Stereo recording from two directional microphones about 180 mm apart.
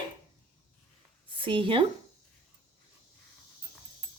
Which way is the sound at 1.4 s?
30° right (ahead or behind).